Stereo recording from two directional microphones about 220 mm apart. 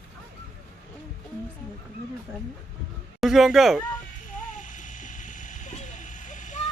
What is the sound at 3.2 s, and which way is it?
Speech, centre (ahead or behind).